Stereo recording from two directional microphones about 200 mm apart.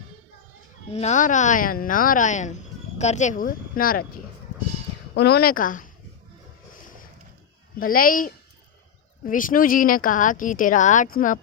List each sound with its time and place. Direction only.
0.9 s a woman's voice: 30° left (ahead or behind)
5.1 s a woman's voice: 55° left (ahead or behind)
7.8 s a woman's voice: 45° left (ahead or behind)